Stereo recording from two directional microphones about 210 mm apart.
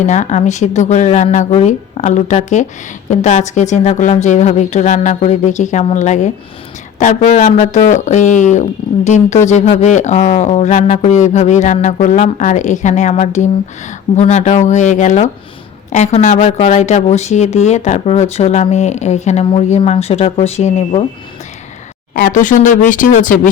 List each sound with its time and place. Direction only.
0.0 s speech: 35° left (ahead or behind)
22.1 s speech: 40° left (ahead or behind)